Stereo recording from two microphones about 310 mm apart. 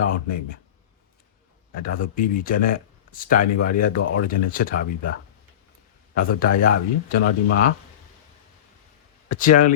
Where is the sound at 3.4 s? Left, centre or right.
Left.